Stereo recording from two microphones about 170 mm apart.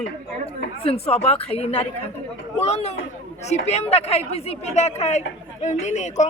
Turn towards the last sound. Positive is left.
turn(degrees=45)  # may be behind; listen again after turning